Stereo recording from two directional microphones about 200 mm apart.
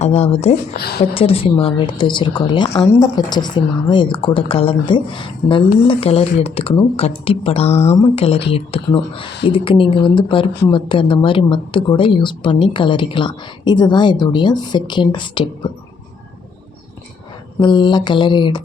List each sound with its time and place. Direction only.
0.0 s speech: 30° left (ahead or behind)
0.7 s a woman's voice: 50° left (ahead or behind)
1.1 s speech: 30° left (ahead or behind)
17.6 s speech: 25° left (ahead or behind)